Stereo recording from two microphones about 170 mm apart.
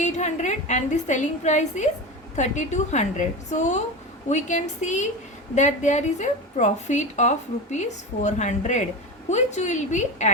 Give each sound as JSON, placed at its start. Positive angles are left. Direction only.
{"t": 0.0, "sound": "a woman's voice", "side_deg": 45}